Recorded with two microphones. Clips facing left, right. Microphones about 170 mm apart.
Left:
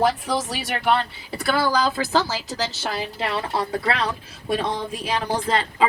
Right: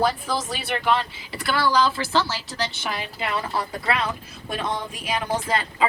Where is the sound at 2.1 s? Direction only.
40° left (ahead or behind).